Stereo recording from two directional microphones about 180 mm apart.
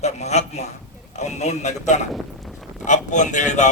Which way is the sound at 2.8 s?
45° left (ahead or behind).